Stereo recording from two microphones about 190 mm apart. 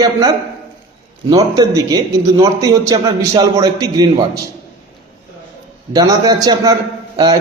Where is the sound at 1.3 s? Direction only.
20° right (ahead or behind).